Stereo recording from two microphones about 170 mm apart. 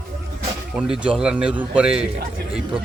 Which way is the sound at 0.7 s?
5° right (ahead or behind).